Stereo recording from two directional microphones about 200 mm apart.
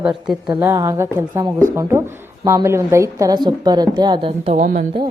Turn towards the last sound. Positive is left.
turn(degrees=-40)  # may be behind; listen again after turning